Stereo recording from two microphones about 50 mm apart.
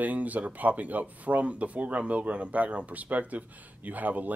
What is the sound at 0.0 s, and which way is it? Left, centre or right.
Speech, right.